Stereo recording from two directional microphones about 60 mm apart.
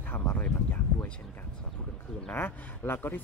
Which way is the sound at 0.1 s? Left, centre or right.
Left.